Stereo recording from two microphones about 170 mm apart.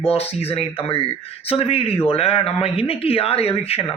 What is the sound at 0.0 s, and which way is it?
A man's voice, 35° left (ahead or behind).